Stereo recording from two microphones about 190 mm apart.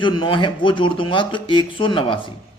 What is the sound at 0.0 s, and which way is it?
A man's voice, 25° left (ahead or behind).